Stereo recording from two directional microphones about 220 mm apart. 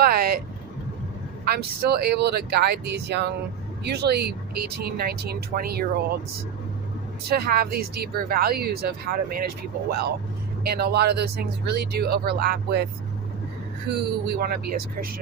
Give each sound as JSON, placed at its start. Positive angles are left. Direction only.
{"t": 0.0, "sound": "vehicle", "side_deg": -45}
{"t": 1.5, "sound": "speech", "side_deg": -45}
{"t": 7.3, "sound": "speech", "side_deg": -45}